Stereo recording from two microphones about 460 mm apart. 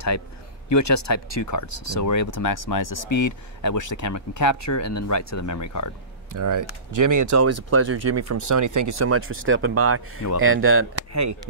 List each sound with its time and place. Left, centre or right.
0.7 s speech: left
6.3 s speech: right